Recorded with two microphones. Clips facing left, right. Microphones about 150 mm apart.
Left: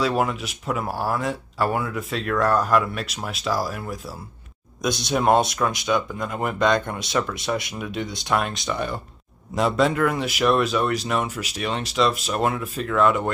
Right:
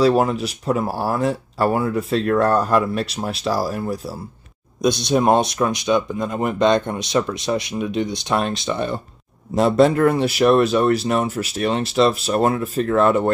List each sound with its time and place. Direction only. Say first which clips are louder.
0.0 s speech: right 6 dB; 35° right (ahead or behind)
4.8 s speech: right 4 dB; 25° right (ahead or behind)
9.6 s speech: right 6 dB; 40° right (ahead or behind)